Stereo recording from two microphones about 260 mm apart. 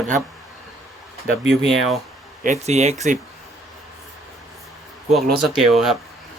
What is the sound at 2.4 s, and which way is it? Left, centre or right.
Speech, right.